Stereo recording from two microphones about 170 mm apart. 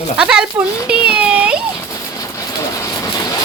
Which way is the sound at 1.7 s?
20° left (ahead or behind).